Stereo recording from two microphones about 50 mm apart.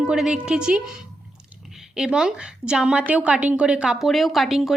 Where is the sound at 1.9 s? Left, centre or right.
Centre.